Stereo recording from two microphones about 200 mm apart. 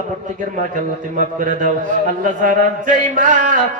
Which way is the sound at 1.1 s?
40° right (ahead or behind).